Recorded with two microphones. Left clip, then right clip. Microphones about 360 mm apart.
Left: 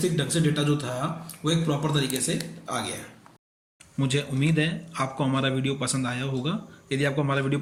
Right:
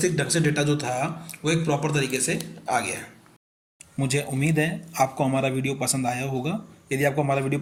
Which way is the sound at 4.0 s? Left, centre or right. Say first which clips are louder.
Right 1 dB; centre.